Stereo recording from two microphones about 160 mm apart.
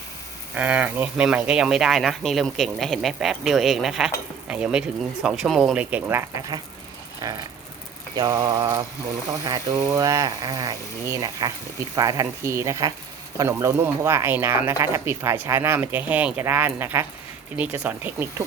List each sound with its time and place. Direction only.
0.5 s speech: 10° right (ahead or behind)